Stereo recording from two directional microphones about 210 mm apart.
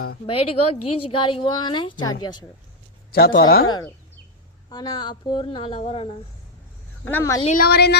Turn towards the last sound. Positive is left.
turn(degrees=50)  # may be behind; listen again after turning